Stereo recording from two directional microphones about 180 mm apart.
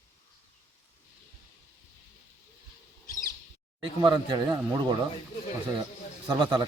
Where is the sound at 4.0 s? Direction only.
25° right (ahead or behind).